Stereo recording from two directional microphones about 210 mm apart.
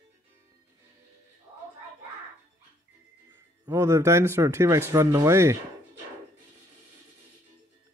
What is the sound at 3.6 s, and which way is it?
Speech, 15° right (ahead or behind).